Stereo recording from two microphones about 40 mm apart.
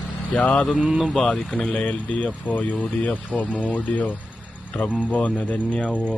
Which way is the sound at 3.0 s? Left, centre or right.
Left.